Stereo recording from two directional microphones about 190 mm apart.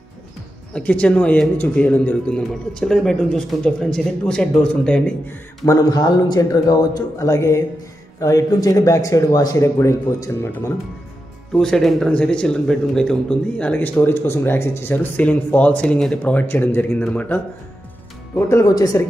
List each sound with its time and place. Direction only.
0.7 s speech: 5° left (ahead or behind)
5.7 s speech: 20° left (ahead or behind)
11.5 s speech: 5° left (ahead or behind)